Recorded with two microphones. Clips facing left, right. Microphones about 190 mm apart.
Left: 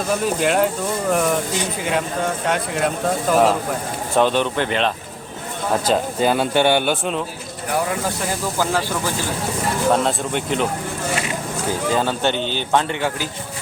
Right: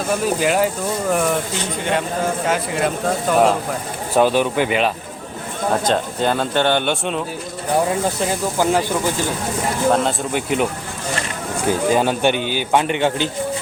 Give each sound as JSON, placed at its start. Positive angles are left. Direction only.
{"t": 0.1, "sound": "a man's voice", "side_deg": 0}
{"t": 5.8, "sound": "speech", "side_deg": 5}
{"t": 9.9, "sound": "speech", "side_deg": 0}
{"t": 11.9, "sound": "a man's voice", "side_deg": -15}
{"t": 13.0, "sound": "a man's voice", "side_deg": -25}